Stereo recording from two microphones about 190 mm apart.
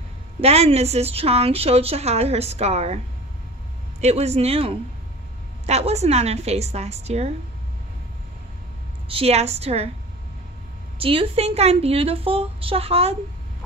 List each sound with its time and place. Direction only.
0.4 s a woman's voice: 35° right (ahead or behind)
4.0 s a woman's voice: 35° right (ahead or behind)
9.1 s a woman's voice: 35° right (ahead or behind)
11.0 s a woman's voice: 30° right (ahead or behind)